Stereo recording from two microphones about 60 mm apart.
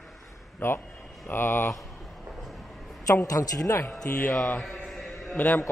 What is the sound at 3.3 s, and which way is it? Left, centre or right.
Speech, left.